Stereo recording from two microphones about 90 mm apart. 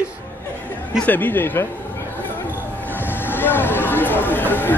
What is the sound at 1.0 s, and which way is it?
Speech, 20° left (ahead or behind).